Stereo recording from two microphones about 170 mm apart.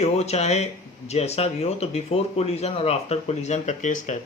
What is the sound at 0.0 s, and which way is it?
Speech, 40° left (ahead or behind).